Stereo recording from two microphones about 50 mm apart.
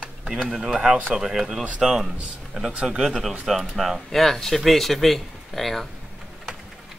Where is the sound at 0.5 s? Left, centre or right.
Centre.